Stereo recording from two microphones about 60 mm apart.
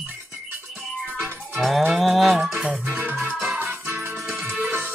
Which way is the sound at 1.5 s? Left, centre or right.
Centre.